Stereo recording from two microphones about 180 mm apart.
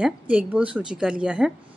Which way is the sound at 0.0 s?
5° right (ahead or behind).